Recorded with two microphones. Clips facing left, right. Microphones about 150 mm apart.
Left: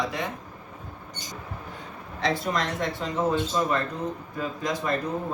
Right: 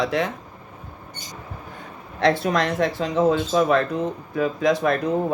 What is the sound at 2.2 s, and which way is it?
Speech, 70° right (ahead or behind).